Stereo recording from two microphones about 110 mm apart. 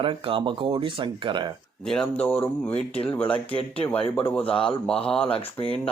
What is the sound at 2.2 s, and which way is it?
Speech, 15° left (ahead or behind).